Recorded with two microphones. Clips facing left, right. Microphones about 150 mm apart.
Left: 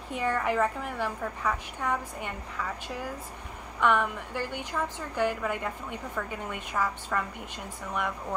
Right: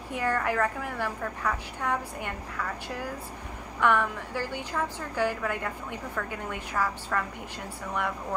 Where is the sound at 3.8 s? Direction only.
15° left (ahead or behind).